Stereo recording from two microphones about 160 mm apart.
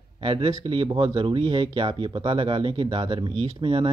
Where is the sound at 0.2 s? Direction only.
35° right (ahead or behind).